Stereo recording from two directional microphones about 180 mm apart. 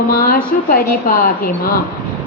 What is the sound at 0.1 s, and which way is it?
A woman's voice, 55° left (ahead or behind).